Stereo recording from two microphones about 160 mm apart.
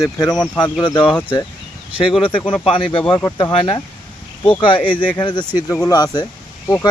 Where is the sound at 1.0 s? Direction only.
10° left (ahead or behind).